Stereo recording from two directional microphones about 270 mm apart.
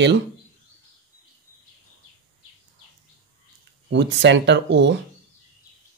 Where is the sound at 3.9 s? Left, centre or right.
Right.